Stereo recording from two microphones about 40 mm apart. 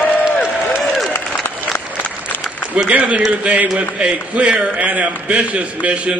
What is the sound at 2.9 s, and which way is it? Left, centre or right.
A man's voice, right.